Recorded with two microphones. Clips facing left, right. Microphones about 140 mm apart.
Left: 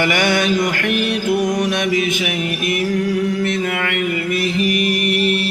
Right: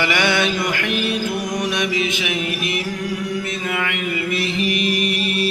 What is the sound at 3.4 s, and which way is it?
Mantra, 60° left (ahead or behind).